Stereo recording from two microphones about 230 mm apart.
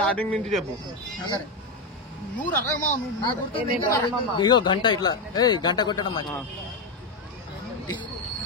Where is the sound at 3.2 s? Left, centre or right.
Centre.